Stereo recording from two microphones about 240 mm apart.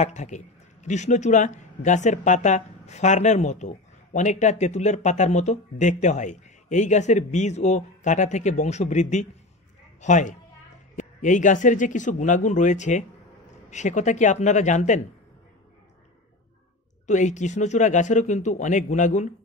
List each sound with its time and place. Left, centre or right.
0.0 s speech: left
17.0 s speech: left